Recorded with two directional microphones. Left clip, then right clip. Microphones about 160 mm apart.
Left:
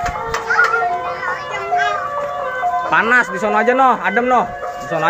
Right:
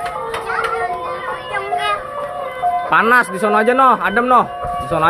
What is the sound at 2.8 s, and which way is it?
Speech, 25° right (ahead or behind).